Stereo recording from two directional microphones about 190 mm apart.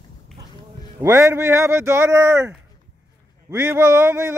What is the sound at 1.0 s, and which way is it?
Speech, 15° right (ahead or behind).